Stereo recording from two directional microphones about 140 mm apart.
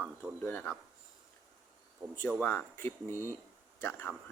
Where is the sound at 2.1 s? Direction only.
10° left (ahead or behind).